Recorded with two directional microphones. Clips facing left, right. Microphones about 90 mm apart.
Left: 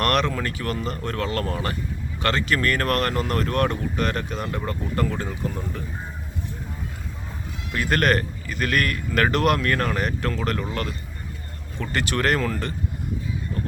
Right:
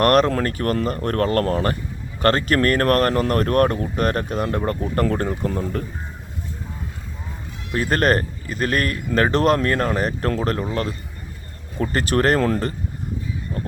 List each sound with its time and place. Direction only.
0.0 s speech: 40° right (ahead or behind)
7.7 s speech: 35° right (ahead or behind)